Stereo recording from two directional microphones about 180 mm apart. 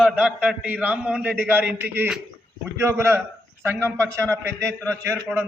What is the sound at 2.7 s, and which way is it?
A man's voice, 15° right (ahead or behind).